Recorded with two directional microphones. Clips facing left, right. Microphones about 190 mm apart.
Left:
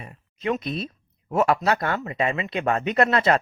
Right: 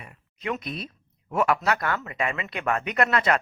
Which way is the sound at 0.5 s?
25° left (ahead or behind).